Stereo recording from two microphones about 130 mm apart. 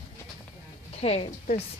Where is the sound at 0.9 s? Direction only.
55° left (ahead or behind).